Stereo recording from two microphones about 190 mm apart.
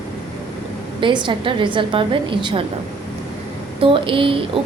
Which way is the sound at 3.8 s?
30° right (ahead or behind).